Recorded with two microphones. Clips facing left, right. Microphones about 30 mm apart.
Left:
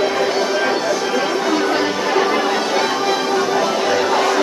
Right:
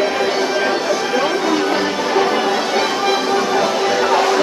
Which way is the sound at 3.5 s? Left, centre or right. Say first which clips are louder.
Right 1 dB; centre.